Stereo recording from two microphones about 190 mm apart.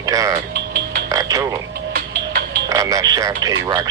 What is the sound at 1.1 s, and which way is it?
Frog, 15° right (ahead or behind).